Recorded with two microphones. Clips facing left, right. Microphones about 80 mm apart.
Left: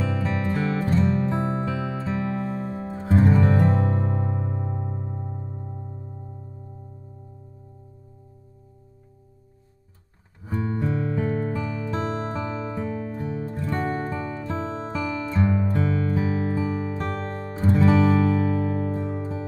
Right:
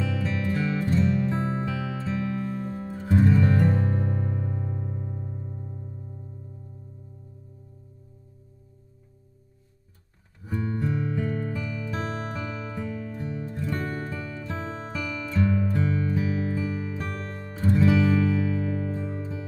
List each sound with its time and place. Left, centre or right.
0.0 s music: left
3.8 s music: left
10.4 s music: left